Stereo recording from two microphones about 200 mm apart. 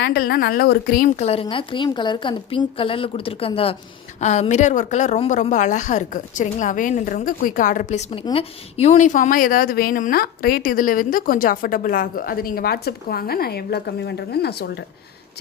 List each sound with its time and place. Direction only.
0.0 s a woman's voice: 50° left (ahead or behind)